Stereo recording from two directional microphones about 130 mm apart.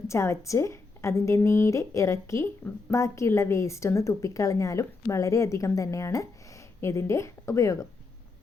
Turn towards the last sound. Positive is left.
turn(degrees=25)  # may be behind; listen again after turning